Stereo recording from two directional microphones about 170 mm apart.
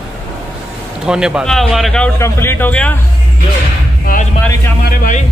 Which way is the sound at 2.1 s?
15° left (ahead or behind).